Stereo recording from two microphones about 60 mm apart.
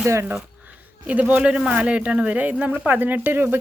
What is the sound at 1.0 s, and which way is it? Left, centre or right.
Speech, right.